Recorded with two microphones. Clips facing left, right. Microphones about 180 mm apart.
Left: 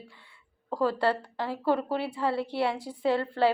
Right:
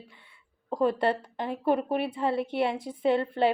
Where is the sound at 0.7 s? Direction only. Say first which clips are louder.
Right 1 dB; 20° right (ahead or behind).